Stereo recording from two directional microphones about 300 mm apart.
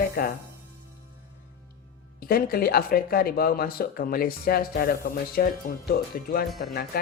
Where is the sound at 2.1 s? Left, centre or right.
Left.